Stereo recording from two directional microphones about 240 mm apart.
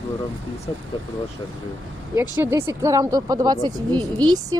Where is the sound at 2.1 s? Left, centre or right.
Centre.